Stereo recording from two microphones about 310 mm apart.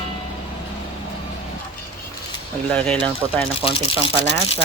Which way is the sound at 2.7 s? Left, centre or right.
Centre.